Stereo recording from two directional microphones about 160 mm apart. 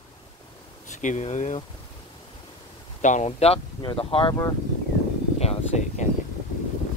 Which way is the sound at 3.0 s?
45° left (ahead or behind).